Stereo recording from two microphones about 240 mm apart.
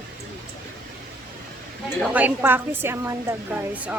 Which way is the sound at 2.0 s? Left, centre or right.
Centre.